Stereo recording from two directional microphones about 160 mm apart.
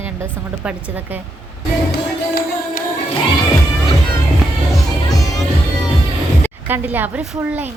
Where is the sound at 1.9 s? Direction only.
70° left (ahead or behind).